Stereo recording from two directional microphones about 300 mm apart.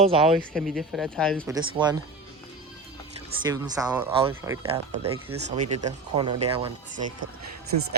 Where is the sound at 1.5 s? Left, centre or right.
Centre.